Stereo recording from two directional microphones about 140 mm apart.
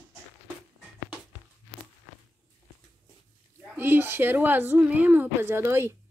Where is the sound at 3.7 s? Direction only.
15° right (ahead or behind).